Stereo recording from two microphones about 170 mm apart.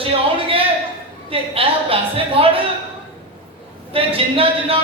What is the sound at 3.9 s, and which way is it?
Speech, 35° right (ahead or behind).